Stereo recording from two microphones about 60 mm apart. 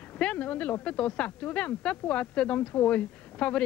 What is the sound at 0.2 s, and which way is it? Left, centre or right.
Speech, centre.